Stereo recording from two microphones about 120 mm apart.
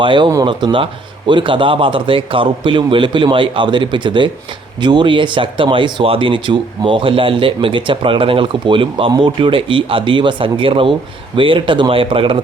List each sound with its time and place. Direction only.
0.0 s speech: 40° right (ahead or behind)